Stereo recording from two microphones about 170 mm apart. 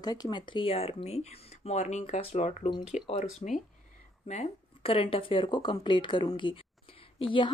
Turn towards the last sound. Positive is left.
turn(degrees=30)  # may be behind; listen again after turning